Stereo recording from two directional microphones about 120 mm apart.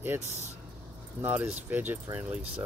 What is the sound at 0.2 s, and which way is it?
Speech, 65° right (ahead or behind).